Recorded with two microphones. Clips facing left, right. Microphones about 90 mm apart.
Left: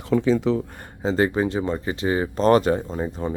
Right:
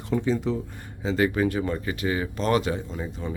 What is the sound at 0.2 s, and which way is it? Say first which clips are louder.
Speech: left 5 dB; 90° left.